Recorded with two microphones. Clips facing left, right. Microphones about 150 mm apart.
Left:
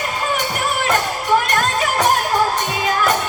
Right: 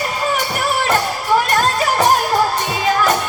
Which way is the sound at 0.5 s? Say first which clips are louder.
Right 2 dB; 40° right (ahead or behind).